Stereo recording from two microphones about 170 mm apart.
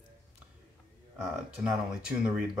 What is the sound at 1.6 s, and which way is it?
Speech, 5° right (ahead or behind).